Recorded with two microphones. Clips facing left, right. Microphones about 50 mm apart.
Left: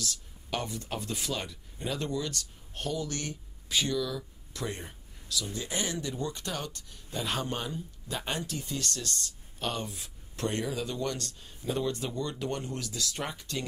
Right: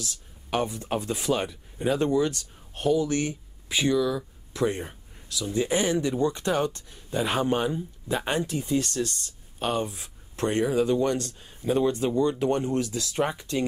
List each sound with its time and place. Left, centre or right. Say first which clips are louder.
0.0 s speech: even; right